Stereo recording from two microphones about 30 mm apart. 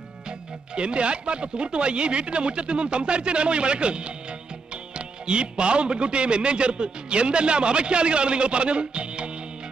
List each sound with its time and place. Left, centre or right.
0.7 s a man's voice: right